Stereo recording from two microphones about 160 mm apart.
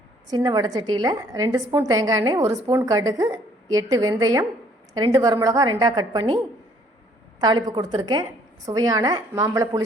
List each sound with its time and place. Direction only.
0.3 s a woman's voice: 25° right (ahead or behind)